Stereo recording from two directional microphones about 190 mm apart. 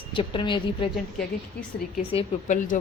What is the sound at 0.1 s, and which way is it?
Speech, 25° left (ahead or behind).